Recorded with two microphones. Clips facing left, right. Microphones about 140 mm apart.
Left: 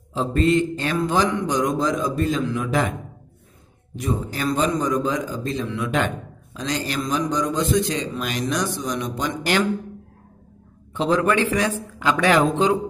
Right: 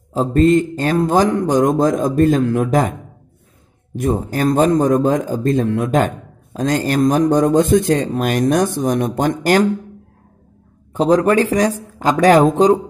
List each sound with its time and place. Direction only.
0.1 s speech: 45° right (ahead or behind)
3.9 s speech: 50° right (ahead or behind)
10.9 s speech: 40° right (ahead or behind)